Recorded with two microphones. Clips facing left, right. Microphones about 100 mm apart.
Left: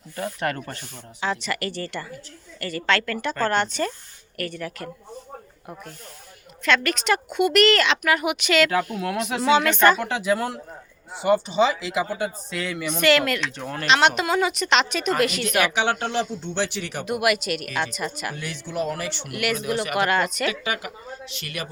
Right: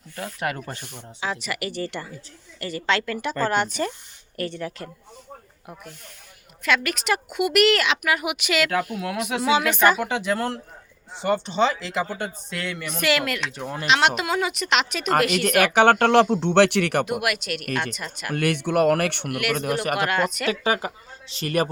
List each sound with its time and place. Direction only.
0.2 s a woman's voice: centre (ahead or behind); by 4.9 s 25° right (ahead or behind)
6.6 s a woman's voice: 5° right (ahead or behind)
15.4 s speech: 50° right (ahead or behind)
17.1 s speech: centre (ahead or behind)
18.3 s speech: 60° right (ahead or behind)
19.5 s speech: 45° right (ahead or behind)
20.0 s speech: centre (ahead or behind)
20.5 s a woman's voice: 35° right (ahead or behind)